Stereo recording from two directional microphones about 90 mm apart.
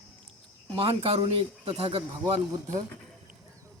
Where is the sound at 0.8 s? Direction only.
90° right.